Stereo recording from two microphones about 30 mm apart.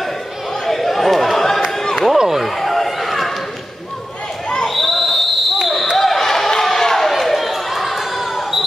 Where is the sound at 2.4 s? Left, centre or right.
Centre.